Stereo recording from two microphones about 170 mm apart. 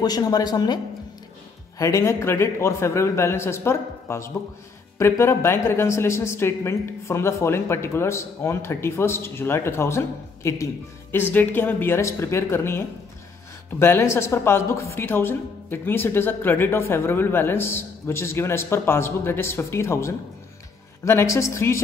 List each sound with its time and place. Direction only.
0.0 s speech: 20° left (ahead or behind)
1.8 s a woman's voice: 20° left (ahead or behind)